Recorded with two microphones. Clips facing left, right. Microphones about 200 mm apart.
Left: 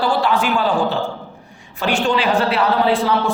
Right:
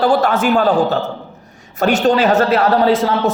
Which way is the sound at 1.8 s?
40° right (ahead or behind).